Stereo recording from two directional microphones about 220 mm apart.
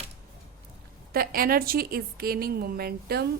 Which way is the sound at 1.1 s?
40° right (ahead or behind).